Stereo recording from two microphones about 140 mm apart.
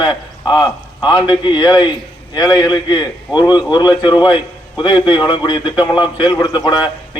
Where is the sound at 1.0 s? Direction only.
30° left (ahead or behind).